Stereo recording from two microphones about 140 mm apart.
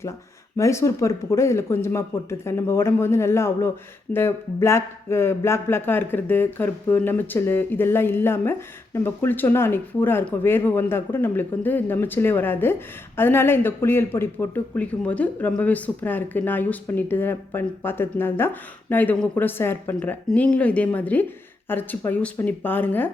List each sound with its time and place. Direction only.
0.5 s speech: 20° left (ahead or behind)